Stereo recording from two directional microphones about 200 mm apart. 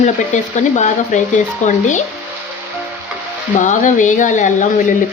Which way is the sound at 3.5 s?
40° left (ahead or behind).